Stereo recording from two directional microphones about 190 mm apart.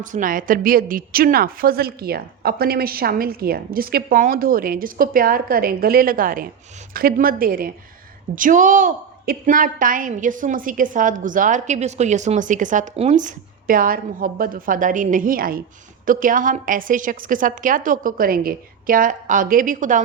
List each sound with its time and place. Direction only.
0.0 s a woman's voice: 45° right (ahead or behind)